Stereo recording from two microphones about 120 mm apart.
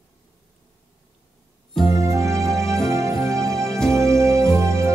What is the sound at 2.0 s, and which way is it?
Music, 25° right (ahead or behind).